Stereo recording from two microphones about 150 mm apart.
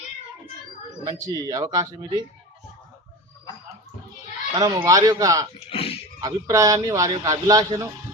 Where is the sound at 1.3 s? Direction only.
25° right (ahead or behind).